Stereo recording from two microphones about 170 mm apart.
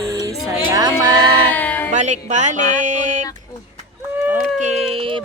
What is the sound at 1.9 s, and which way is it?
Music, 45° right (ahead or behind).